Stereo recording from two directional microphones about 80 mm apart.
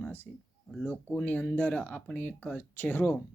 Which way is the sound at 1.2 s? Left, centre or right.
Centre.